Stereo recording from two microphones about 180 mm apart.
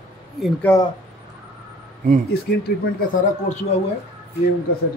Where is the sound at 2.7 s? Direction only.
60° left (ahead or behind).